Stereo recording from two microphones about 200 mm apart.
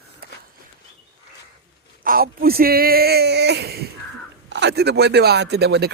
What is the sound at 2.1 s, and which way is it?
Speech, 50° right (ahead or behind).